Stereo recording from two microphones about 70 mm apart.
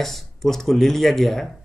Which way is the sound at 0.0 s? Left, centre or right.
Centre.